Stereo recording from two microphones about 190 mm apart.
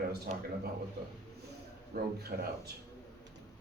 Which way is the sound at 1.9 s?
55° right (ahead or behind).